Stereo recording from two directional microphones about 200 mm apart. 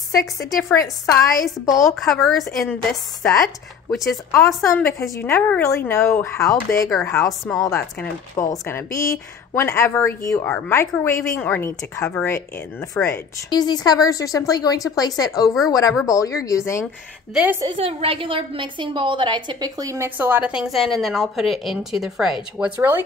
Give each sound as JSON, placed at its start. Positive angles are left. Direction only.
{"t": 0.1, "sound": "speech", "side_deg": 15}
{"t": 1.8, "sound": "a woman's voice", "side_deg": 0}
{"t": 4.3, "sound": "speech", "side_deg": 15}
{"t": 6.9, "sound": "a woman's voice", "side_deg": 5}
{"t": 7.5, "sound": "speech", "side_deg": 15}
{"t": 17.3, "sound": "a woman's voice", "side_deg": -5}
{"t": 17.7, "sound": "a woman's voice", "side_deg": -30}